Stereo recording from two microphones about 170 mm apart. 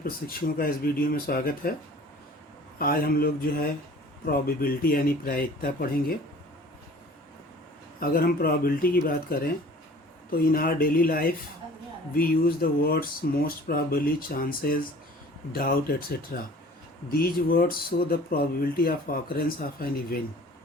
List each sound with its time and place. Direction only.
0.0 s speech: 60° left (ahead or behind)
2.7 s speech: 60° left (ahead or behind)
7.9 s speech: 60° left (ahead or behind)